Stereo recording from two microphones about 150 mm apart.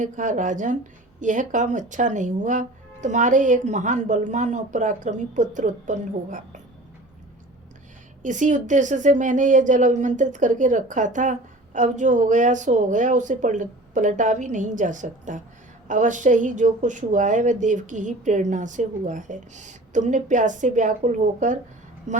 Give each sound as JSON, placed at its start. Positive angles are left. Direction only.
{"t": 0.0, "sound": "a woman's voice", "side_deg": -55}
{"t": 8.2, "sound": "a woman's voice", "side_deg": -55}